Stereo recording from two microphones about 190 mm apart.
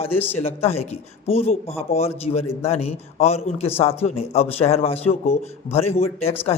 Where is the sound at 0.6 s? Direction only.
35° left (ahead or behind).